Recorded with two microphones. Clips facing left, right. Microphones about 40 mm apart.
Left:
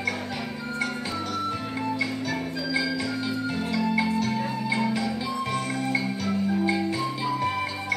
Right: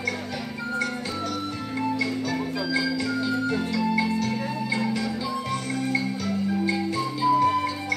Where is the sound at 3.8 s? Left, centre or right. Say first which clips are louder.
Left 1 dB; centre.